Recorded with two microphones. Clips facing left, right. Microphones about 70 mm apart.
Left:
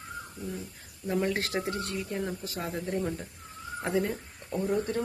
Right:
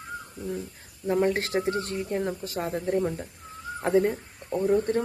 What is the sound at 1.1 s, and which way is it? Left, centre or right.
Speech, right.